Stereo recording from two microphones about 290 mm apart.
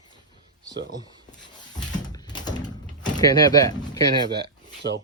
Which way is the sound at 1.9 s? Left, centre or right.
Centre.